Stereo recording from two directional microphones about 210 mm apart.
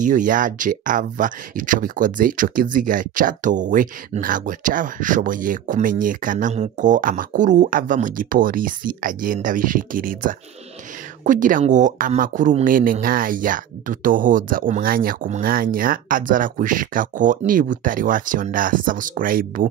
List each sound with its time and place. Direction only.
0.0 s speech: 40° right (ahead or behind)